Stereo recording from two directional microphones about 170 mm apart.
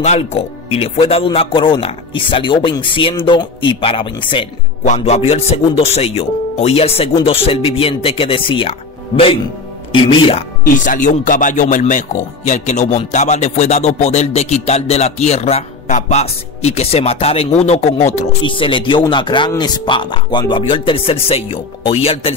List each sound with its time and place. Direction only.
0.0 s a man's voice: 40° left (ahead or behind)
4.8 s speech: 40° left (ahead or behind)
10.6 s speech: 50° left (ahead or behind)
18.4 s a man's voice: 30° left (ahead or behind)